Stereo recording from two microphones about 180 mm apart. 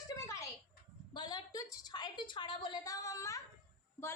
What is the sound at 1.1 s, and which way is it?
A woman's voice, 25° left (ahead or behind).